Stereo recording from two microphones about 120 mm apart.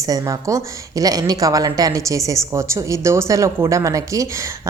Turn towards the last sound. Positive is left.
turn(degrees=-25)  # may be behind; listen again after turning